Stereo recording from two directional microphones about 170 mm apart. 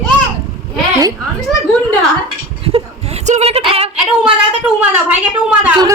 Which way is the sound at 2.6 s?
35° right (ahead or behind).